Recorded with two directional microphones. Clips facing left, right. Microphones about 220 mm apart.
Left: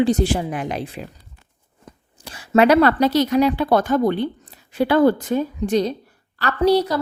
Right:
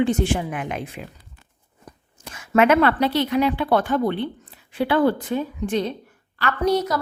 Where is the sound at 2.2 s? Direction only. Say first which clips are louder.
Left 3 dB; 35° left (ahead or behind).